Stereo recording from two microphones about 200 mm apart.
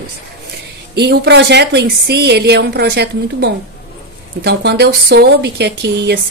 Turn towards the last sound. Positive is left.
turn(degrees=-55)  # may be behind; listen again after turning